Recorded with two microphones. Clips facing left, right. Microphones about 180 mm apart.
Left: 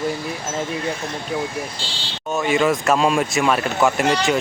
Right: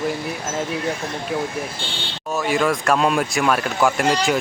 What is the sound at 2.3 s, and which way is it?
Speech, centre (ahead or behind).